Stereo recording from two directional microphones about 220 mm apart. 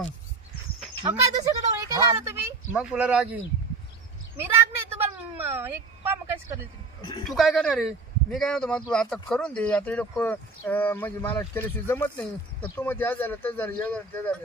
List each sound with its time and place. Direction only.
1.0 s speech: 15° right (ahead or behind)
1.7 s a sound: 15° right (ahead or behind)
2.2 s speech: 10° right (ahead or behind)
4.4 s speech: 10° right (ahead or behind)
7.3 s a man's voice: centre (ahead or behind)